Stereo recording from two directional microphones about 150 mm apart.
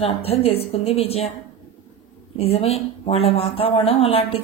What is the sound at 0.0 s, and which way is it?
A woman's voice, 40° left (ahead or behind).